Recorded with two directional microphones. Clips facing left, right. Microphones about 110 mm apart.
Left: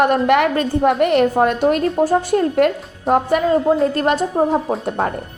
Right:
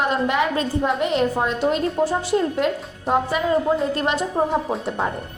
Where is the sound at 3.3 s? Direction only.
55° left (ahead or behind).